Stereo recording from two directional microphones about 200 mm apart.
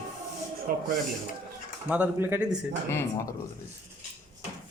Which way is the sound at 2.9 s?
15° left (ahead or behind).